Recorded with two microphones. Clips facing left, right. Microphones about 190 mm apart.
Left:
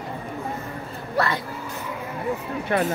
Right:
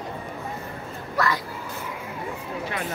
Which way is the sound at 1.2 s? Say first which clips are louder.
Left 1 dB; 30° left (ahead or behind).